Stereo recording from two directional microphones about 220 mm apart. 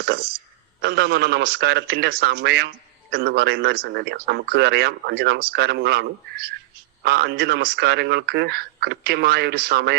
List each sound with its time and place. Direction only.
0.0 s speech: 45° right (ahead or behind)